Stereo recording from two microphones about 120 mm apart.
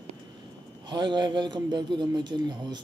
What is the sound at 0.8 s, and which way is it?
A man's voice, 40° right (ahead or behind).